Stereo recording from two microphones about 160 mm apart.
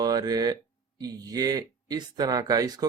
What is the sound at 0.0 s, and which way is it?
Speech, 25° right (ahead or behind).